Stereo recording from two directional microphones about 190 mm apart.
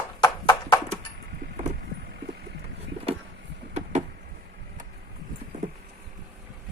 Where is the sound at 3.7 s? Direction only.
40° right (ahead or behind).